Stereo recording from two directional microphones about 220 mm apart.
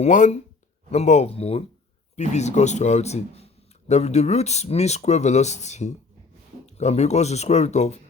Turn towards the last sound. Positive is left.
turn(degrees=30)  # may be behind; listen again after turning